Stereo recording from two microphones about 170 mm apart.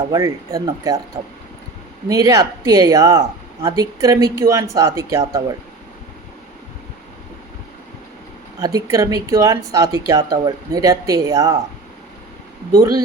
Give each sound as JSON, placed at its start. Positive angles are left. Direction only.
{"t": 0.1, "sound": "speech", "side_deg": -20}
{"t": 2.0, "sound": "speech", "side_deg": -20}
{"t": 8.6, "sound": "speech", "side_deg": -20}